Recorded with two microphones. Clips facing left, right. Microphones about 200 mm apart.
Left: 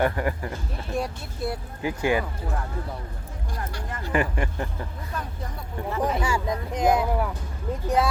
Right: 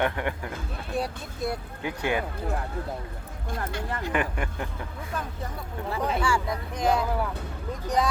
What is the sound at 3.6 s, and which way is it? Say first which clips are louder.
Speech: right 3 dB; 20° right (ahead or behind).